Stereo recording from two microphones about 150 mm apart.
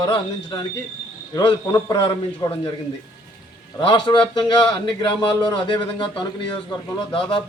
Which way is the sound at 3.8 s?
30° left (ahead or behind).